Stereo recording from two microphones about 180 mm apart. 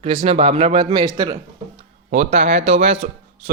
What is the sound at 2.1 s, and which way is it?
Speech, 40° right (ahead or behind).